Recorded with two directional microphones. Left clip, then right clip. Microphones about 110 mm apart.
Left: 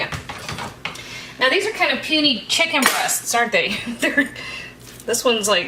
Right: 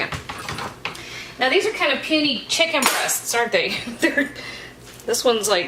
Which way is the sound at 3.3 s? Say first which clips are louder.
Left 2 dB; 15° right (ahead or behind).